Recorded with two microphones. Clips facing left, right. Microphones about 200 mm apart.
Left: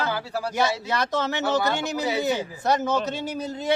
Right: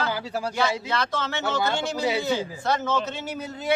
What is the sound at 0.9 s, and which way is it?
Speech, 20° left (ahead or behind).